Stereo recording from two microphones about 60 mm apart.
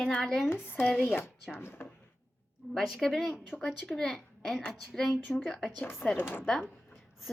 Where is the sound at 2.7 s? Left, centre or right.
Centre.